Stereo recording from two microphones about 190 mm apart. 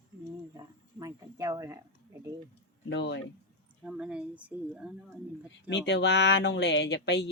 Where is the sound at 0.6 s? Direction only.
20° right (ahead or behind).